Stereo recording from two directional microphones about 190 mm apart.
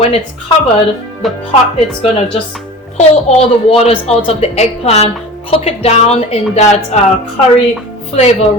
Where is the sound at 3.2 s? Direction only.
30° left (ahead or behind).